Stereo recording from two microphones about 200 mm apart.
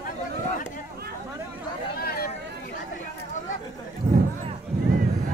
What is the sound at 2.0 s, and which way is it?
Chatter, 50° left (ahead or behind).